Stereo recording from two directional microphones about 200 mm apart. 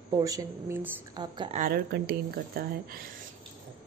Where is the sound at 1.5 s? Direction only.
45° right (ahead or behind).